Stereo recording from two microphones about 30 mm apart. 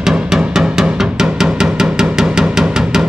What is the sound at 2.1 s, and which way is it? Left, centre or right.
Drum, right.